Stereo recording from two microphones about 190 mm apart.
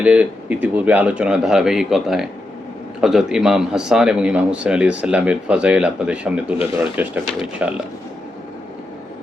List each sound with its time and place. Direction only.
0.0 s a man's voice: 10° right (ahead or behind)